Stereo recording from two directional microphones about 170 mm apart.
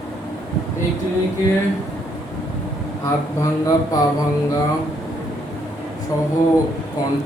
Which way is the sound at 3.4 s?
20° left (ahead or behind).